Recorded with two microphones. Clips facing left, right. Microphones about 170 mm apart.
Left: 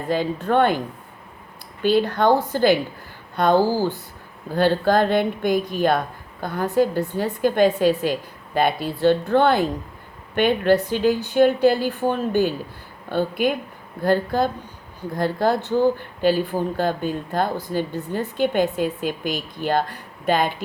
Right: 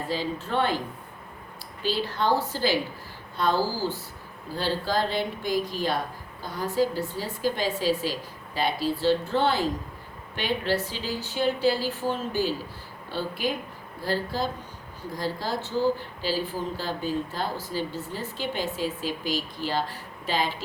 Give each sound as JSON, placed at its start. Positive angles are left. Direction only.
{"t": 0.1, "sound": "a woman's voice", "side_deg": 55}
{"t": 1.8, "sound": "a woman's voice", "side_deg": 55}